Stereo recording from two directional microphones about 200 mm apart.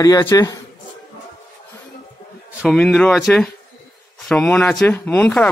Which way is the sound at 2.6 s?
Centre (ahead or behind).